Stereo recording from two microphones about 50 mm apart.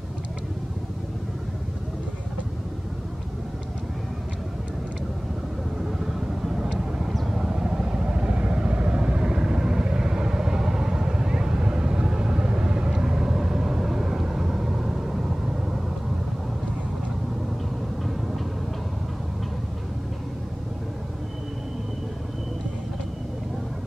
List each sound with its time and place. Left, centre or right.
5.8 s vehicle: centre